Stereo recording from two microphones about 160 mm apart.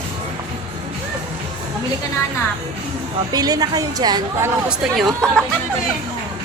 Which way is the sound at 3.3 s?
25° right (ahead or behind).